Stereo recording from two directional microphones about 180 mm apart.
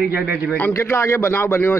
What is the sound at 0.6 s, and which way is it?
A man's voice, 10° left (ahead or behind).